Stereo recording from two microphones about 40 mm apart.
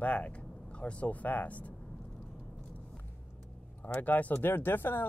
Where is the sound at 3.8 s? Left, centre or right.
Left.